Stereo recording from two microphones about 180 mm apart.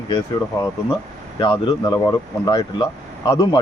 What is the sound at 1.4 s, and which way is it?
Speech, 20° left (ahead or behind).